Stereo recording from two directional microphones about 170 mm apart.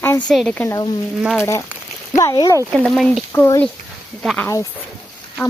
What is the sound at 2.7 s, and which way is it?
Speech, centre (ahead or behind).